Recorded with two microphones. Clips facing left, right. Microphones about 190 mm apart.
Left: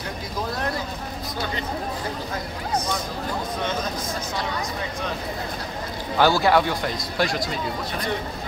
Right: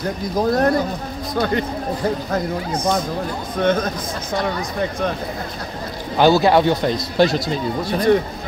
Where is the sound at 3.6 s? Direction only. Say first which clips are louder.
Right 12 dB; 60° right (ahead or behind).